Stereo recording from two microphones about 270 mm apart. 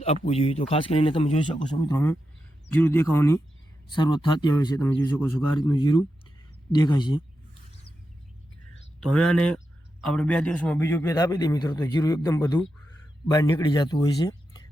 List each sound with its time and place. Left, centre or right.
0.0 s a man's voice: left
9.0 s a man's voice: centre